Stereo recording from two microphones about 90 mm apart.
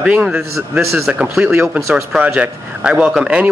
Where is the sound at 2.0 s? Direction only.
5° right (ahead or behind).